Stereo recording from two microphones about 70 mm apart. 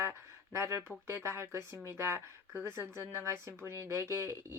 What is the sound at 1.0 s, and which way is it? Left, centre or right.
Speech, right.